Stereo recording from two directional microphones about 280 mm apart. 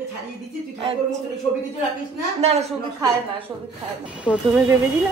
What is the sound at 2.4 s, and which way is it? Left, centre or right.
Speech, right.